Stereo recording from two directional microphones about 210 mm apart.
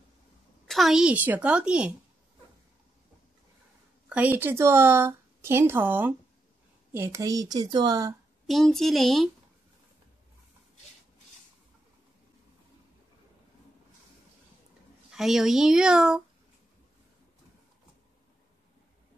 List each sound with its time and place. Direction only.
0.7 s a woman's voice: centre (ahead or behind)
4.1 s speech: 10° right (ahead or behind)
8.5 s a woman's voice: centre (ahead or behind)
15.0 s a woman's voice: centre (ahead or behind)